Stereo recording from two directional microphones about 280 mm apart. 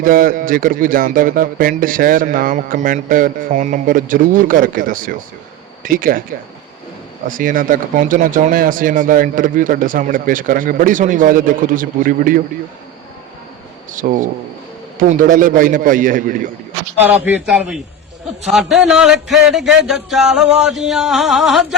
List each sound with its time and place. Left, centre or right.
0.0 s speech: right
7.3 s speech: right
13.9 s speech: right
17.0 s speech: centre